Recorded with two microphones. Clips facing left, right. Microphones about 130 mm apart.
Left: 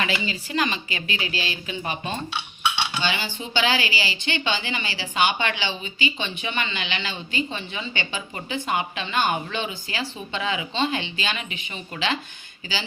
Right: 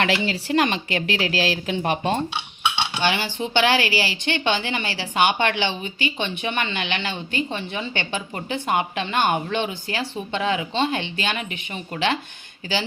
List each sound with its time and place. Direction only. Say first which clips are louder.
0.0 s a woman's voice: right 5 dB; 65° right (ahead or behind)
2.3 s cutlery: right 1 dB; 25° right (ahead or behind)
3.0 s speech: right 5 dB; 65° right (ahead or behind)